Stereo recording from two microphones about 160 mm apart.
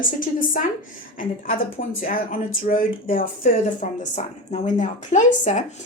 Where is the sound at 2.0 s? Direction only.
60° left (ahead or behind).